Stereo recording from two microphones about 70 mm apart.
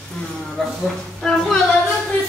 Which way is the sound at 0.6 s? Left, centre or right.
Centre.